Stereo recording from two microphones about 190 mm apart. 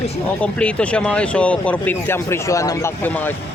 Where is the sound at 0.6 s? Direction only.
5° left (ahead or behind).